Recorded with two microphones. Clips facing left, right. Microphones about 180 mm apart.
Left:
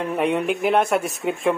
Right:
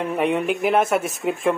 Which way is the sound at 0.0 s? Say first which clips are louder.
Even; centre (ahead or behind).